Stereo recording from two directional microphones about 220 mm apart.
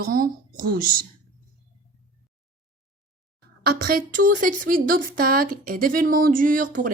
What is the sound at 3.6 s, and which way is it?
Speech, 45° right (ahead or behind).